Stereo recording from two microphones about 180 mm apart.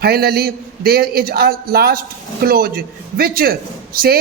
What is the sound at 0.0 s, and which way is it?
A man's voice, 60° right (ahead or behind).